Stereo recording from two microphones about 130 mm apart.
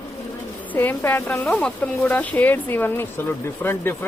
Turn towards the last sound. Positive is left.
turn(degrees=15)  # may be behind; listen again after turning